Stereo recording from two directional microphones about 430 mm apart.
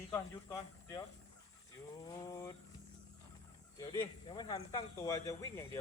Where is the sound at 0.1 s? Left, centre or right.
Centre.